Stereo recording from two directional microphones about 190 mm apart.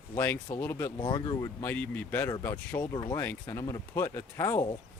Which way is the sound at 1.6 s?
10° left (ahead or behind).